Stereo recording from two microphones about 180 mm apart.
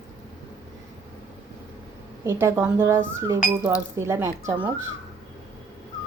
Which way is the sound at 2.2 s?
15° right (ahead or behind).